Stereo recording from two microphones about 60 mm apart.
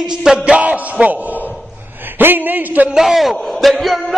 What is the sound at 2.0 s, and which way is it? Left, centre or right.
Speech, right.